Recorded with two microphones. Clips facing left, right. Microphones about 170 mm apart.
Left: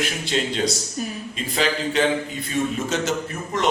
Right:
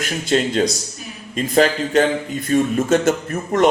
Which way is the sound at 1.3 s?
45° right (ahead or behind).